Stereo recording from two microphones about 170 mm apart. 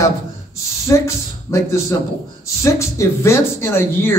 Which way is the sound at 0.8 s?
15° left (ahead or behind).